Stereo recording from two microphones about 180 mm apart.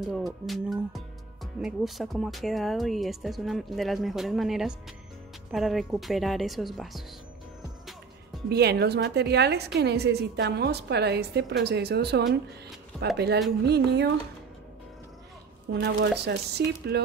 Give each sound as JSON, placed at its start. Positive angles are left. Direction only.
{"t": 0.1, "sound": "speech", "side_deg": 0}
{"t": 8.5, "sound": "a woman's voice", "side_deg": -65}
{"t": 12.9, "sound": "speech", "side_deg": 0}
{"t": 13.7, "sound": "speech", "side_deg": -70}
{"t": 15.7, "sound": "a woman's voice", "side_deg": -65}